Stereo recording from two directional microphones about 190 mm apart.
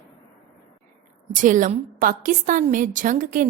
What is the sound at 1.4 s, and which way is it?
A woman's voice, 40° right (ahead or behind).